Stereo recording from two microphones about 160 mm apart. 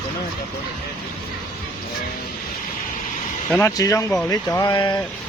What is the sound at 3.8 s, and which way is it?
Speech, 20° left (ahead or behind).